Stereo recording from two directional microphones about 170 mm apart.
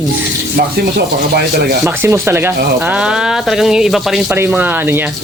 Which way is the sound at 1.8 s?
15° right (ahead or behind).